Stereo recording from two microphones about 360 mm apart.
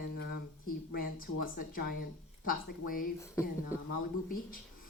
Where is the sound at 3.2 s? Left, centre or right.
Centre.